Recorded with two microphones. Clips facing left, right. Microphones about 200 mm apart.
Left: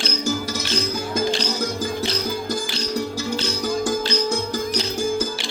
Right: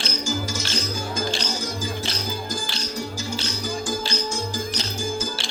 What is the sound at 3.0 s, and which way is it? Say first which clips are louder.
Music: left 4 dB; 60° left (ahead or behind).